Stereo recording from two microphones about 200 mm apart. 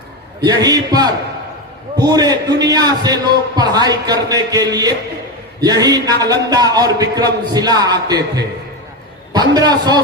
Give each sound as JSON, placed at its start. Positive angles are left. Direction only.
{"t": 0.4, "sound": "a man's voice", "side_deg": -20}